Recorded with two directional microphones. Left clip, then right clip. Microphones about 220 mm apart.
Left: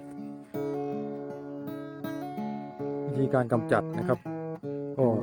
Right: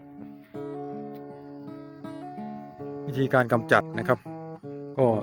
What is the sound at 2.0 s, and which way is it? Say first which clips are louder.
Music: left 2 dB; 45° left (ahead or behind).